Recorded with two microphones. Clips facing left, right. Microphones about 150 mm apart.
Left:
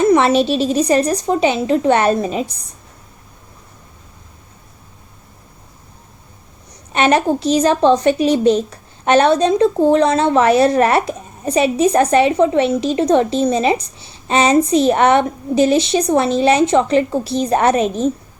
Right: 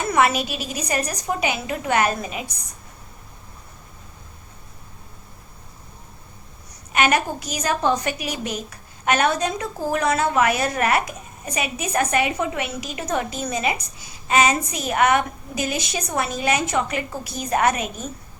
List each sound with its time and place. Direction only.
0.0 s a child's voice: 25° left (ahead or behind)
6.9 s a child's voice: 30° left (ahead or behind)